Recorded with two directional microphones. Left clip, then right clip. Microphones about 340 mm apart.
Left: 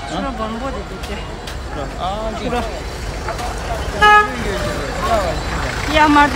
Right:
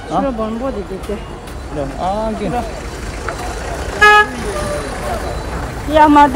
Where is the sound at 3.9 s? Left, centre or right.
Right.